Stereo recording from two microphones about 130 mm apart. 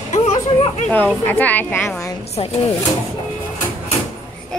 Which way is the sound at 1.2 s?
15° left (ahead or behind).